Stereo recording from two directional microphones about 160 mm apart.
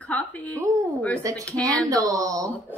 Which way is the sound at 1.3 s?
20° right (ahead or behind).